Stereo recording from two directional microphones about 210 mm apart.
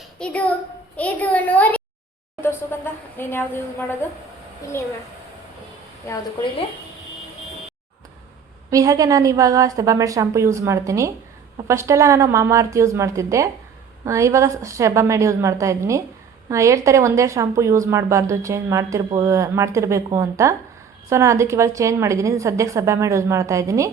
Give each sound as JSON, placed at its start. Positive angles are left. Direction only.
{"t": 0.2, "sound": "a woman's voice", "side_deg": 5}
{"t": 8.7, "sound": "speech", "side_deg": -15}